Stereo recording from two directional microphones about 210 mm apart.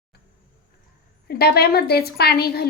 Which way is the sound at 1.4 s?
50° left (ahead or behind).